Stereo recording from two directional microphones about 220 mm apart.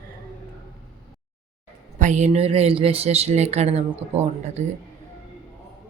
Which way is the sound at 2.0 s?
35° right (ahead or behind).